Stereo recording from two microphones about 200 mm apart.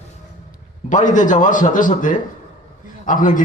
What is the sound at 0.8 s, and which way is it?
A man's voice, 40° left (ahead or behind).